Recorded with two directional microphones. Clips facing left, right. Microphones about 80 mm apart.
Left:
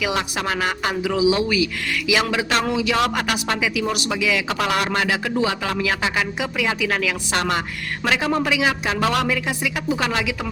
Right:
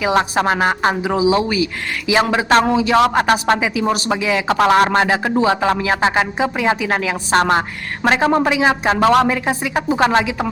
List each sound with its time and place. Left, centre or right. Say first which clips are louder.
0.0 s a man's voice: right 7 dB; right